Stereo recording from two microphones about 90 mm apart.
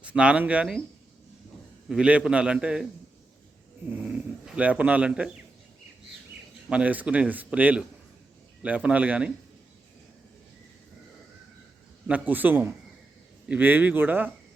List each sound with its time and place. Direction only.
0.0 s a man's voice: 15° right (ahead or behind)
1.9 s a man's voice: 10° right (ahead or behind)
4.4 s a man's voice: 15° right (ahead or behind)
6.7 s a man's voice: 15° right (ahead or behind)
12.0 s speech: 20° right (ahead or behind)